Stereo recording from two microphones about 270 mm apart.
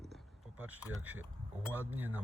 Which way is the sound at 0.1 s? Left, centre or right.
Centre.